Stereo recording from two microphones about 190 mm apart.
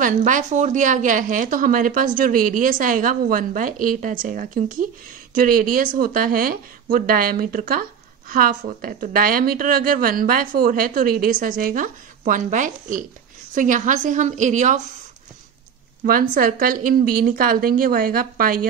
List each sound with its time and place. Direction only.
0.0 s a woman's voice: 40° right (ahead or behind)
16.1 s a woman's voice: 45° right (ahead or behind)